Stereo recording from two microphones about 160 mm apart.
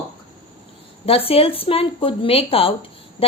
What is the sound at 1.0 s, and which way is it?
A woman's voice, 35° left (ahead or behind).